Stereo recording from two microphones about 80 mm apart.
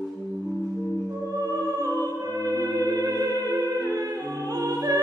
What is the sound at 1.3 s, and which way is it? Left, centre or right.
Music, right.